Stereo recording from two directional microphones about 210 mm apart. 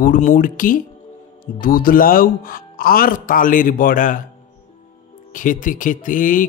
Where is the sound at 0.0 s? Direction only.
40° left (ahead or behind).